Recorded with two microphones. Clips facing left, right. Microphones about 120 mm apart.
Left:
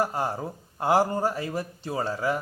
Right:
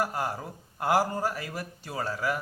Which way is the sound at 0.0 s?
25° left (ahead or behind).